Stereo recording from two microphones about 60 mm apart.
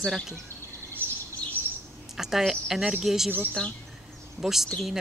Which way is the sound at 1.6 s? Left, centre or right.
Right.